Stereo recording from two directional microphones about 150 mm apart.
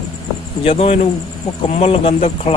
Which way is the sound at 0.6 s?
40° left (ahead or behind).